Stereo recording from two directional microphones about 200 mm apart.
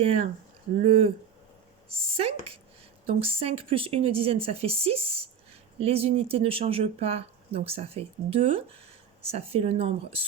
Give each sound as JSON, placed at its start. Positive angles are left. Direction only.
{"t": 0.8, "sound": "speech", "side_deg": -30}
{"t": 2.1, "sound": "speech", "side_deg": -30}